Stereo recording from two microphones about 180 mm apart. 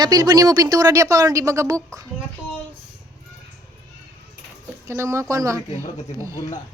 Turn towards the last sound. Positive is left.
turn(degrees=-15)  # may be behind; listen again after turning